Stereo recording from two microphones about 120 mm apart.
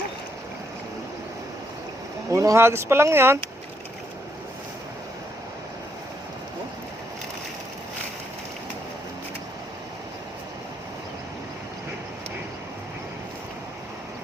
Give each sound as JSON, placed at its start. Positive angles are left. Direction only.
{"t": 2.3, "sound": "speech", "side_deg": -25}